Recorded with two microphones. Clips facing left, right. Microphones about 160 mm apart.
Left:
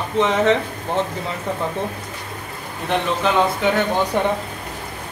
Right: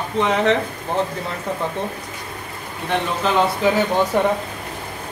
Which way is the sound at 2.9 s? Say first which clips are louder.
Left 1 dB; centre (ahead or behind).